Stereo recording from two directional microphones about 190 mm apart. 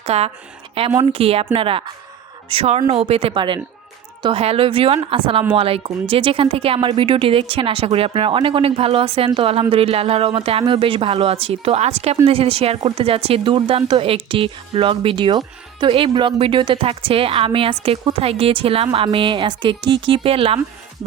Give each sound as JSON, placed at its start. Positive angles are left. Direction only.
{"t": 0.0, "sound": "speech", "side_deg": -35}